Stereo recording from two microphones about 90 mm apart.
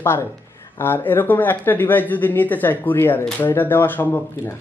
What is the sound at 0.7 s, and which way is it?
Speech, 25° left (ahead or behind).